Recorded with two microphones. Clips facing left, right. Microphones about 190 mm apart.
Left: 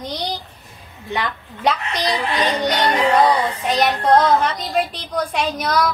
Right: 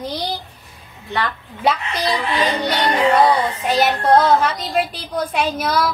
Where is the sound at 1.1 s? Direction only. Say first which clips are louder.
Right 1 dB; 15° left (ahead or behind).